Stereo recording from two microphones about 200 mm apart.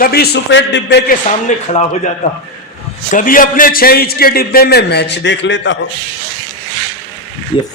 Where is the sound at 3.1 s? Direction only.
45° left (ahead or behind); by 5.8 s 65° left (ahead or behind).